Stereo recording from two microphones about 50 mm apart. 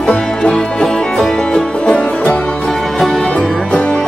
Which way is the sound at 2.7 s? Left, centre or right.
Centre.